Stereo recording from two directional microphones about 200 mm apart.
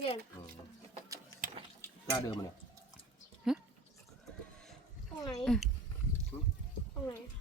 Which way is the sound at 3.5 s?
Centre (ahead or behind).